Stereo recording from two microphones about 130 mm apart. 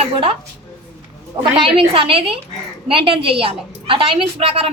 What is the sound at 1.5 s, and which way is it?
A woman's voice, 45° right (ahead or behind).